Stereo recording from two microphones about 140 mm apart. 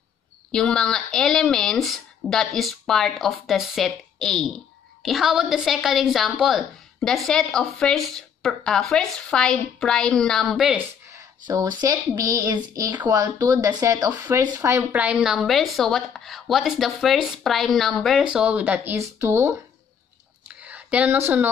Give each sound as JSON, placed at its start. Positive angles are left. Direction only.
{"t": 0.5, "sound": "a woman's voice", "side_deg": 5}
{"t": 11.1, "sound": "a woman's voice", "side_deg": -25}
{"t": 20.4, "sound": "a sound", "side_deg": -10}